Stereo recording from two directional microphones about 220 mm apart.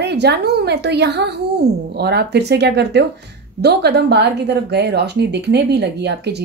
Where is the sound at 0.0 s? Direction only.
50° right (ahead or behind).